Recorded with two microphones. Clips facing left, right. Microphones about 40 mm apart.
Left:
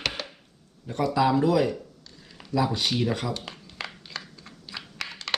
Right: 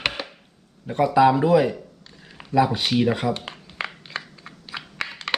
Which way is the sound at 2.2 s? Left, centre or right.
Right.